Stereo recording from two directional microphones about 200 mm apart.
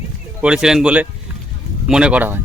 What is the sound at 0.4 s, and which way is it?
Speech, 5° right (ahead or behind).